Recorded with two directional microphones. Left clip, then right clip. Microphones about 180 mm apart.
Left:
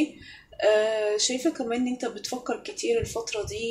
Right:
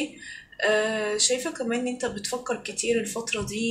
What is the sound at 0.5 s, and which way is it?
Speech, 50° left (ahead or behind).